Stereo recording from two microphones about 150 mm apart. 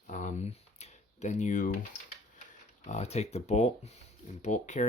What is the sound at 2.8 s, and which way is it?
Speech, 50° left (ahead or behind).